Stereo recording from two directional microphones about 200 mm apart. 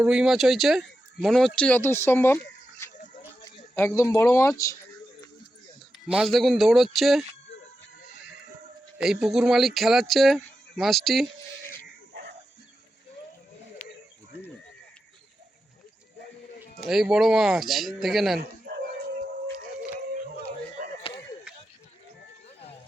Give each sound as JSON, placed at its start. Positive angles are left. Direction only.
{"t": 0.0, "sound": "speech", "side_deg": -5}
{"t": 6.1, "sound": "speech", "side_deg": 0}
{"t": 9.0, "sound": "speech", "side_deg": 0}
{"t": 16.6, "sound": "speech", "side_deg": 0}
{"t": 20.8, "sound": "a sound", "side_deg": -50}